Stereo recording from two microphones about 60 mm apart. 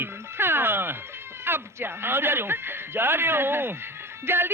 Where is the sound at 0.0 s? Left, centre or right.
Right.